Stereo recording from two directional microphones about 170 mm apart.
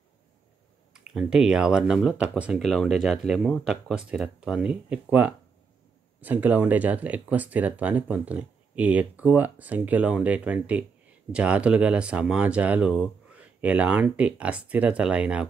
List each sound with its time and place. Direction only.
0.9 s speech: 5° right (ahead or behind)